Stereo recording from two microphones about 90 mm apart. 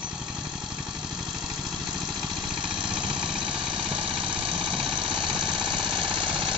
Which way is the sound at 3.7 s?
85° right.